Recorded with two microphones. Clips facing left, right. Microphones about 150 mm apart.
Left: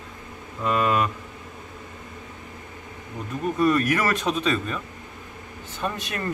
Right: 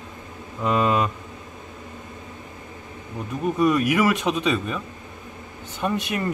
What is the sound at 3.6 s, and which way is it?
Speech, 15° right (ahead or behind).